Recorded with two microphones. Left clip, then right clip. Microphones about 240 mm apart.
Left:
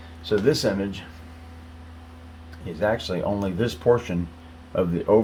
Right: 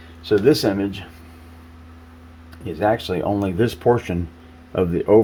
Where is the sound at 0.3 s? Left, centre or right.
Right.